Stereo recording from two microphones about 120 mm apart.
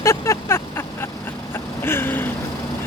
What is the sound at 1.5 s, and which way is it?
Vehicle, 20° left (ahead or behind).